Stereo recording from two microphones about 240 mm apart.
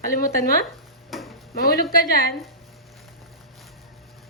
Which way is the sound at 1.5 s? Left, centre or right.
Left.